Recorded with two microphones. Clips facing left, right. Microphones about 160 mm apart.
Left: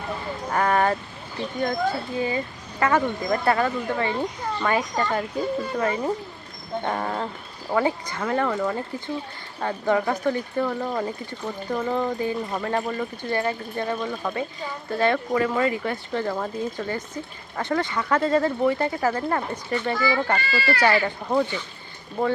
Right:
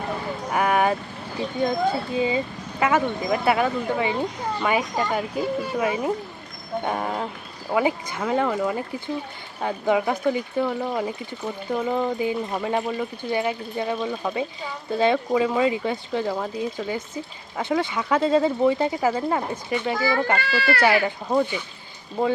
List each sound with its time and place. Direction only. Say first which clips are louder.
0.5 s vehicle: even; 10° right (ahead or behind)
2.1 s speech: right 3 dB; 15° right (ahead or behind)
20.4 s speech: right 1 dB; 65° right (ahead or behind)
20.8 s speech: even; 10° right (ahead or behind)